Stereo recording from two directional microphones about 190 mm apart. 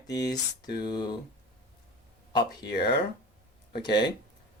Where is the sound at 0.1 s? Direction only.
20° left (ahead or behind).